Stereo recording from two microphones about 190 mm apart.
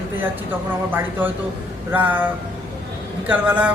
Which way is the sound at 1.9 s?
10° right (ahead or behind).